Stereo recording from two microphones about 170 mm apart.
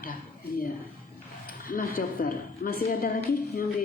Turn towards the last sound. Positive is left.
turn(degrees=60)  # may be behind; listen again after turning